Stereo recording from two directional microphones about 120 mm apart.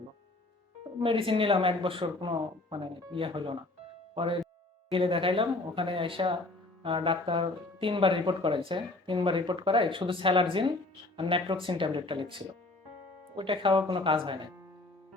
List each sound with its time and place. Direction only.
0.9 s speech: 45° right (ahead or behind)